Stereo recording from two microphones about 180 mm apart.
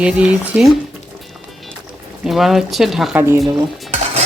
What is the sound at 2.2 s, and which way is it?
Speech, centre (ahead or behind).